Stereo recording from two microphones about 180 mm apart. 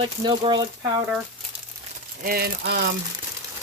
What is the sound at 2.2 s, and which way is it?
Speech, 60° right (ahead or behind).